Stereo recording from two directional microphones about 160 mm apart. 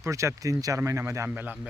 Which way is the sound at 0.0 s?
20° right (ahead or behind).